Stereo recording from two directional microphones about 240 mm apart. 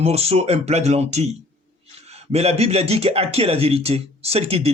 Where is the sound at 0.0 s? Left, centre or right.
Right.